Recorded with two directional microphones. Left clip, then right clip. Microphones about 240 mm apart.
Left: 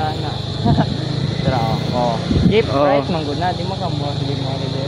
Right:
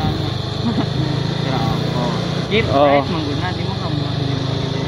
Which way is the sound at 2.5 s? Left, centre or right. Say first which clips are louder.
Right 2 dB; centre.